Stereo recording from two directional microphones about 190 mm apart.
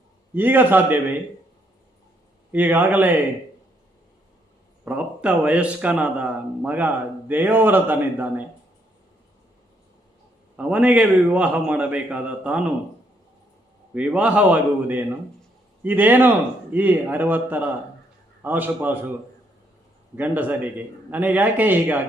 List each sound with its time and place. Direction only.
0.3 s speech: 10° right (ahead or behind)
2.5 s speech: 10° right (ahead or behind)
4.9 s speech: 5° right (ahead or behind)
10.6 s speech: 5° right (ahead or behind)
13.9 s speech: 5° right (ahead or behind)
20.1 s speech: 10° right (ahead or behind)